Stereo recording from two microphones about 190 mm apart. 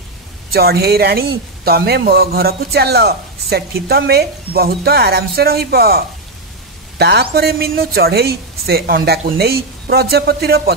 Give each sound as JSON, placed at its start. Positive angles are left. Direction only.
{"t": 0.5, "sound": "speech", "side_deg": -55}